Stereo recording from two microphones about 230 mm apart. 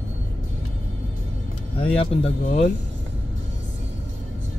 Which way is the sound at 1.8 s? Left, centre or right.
Left.